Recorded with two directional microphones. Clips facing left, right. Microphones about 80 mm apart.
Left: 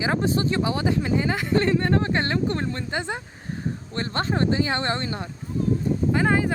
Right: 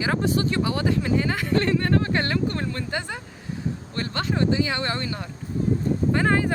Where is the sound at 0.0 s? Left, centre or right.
Left.